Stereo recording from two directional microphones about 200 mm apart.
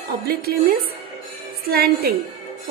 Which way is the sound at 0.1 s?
50° right (ahead or behind).